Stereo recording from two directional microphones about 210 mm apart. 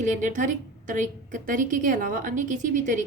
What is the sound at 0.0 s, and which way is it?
A woman's voice, 35° right (ahead or behind).